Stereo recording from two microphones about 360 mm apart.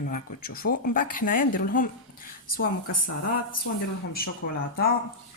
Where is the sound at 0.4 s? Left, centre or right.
Left.